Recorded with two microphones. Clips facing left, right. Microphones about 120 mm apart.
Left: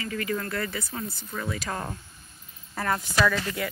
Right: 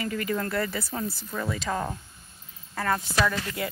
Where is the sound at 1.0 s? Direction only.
5° right (ahead or behind).